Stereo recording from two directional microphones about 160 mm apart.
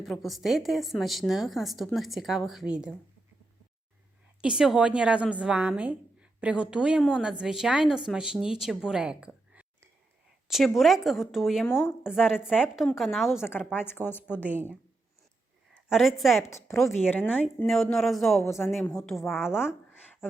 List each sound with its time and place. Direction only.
0.0 s a woman's voice: centre (ahead or behind)
4.4 s a woman's voice: 5° right (ahead or behind)
11.7 s speech: 15° left (ahead or behind)
12.0 s a woman's voice: 5° right (ahead or behind)
13.5 s speech: 10° left (ahead or behind)
14.4 s a woman's voice: 10° right (ahead or behind)
15.9 s a woman's voice: centre (ahead or behind)
16.5 s a woman's voice: 15° left (ahead or behind); by 19.5 s centre (ahead or behind)